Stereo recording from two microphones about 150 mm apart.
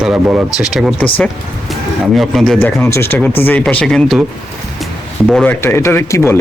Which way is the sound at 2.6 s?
15° left (ahead or behind).